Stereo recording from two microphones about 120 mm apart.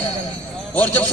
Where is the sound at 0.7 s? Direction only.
15° left (ahead or behind).